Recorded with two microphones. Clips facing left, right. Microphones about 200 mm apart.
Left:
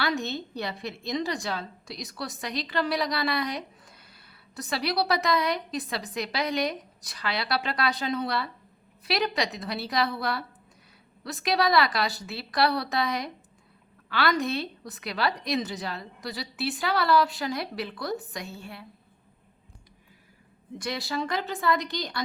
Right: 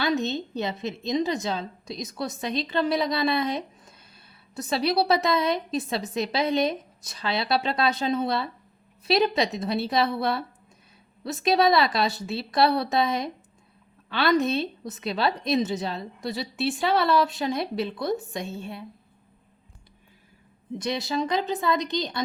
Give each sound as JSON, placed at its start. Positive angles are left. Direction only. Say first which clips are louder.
{"t": 0.0, "sound": "a woman's voice", "louder": "right 4 dB", "side_deg": -20}
{"t": 20.7, "sound": "a woman's voice", "louder": "right 4 dB", "side_deg": -20}